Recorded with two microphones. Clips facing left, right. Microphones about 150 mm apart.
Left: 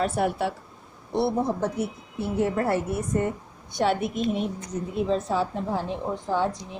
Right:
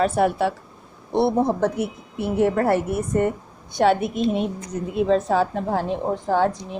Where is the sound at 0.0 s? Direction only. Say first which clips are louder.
Right 5 dB; 90° right.